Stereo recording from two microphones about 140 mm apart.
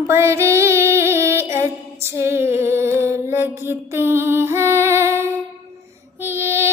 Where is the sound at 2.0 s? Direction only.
15° right (ahead or behind).